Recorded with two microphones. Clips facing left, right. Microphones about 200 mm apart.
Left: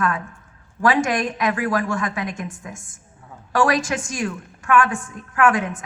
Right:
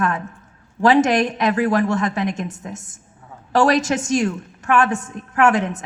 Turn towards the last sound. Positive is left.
turn(degrees=-25)  # may be behind; listen again after turning